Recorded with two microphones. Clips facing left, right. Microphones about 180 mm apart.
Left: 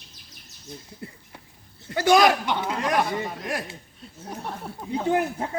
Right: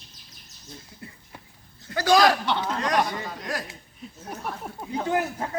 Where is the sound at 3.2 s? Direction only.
25° left (ahead or behind).